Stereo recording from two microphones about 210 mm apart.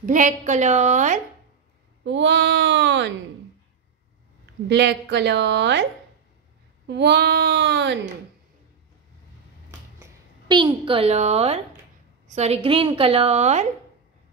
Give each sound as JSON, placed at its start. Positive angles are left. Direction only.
{"t": 0.0, "sound": "a woman's voice", "side_deg": -35}
{"t": 2.0, "sound": "a woman's voice", "side_deg": -55}
{"t": 4.6, "sound": "a woman's voice", "side_deg": -55}
{"t": 6.9, "sound": "a woman's voice", "side_deg": -55}
{"t": 10.5, "sound": "a woman's voice", "side_deg": -25}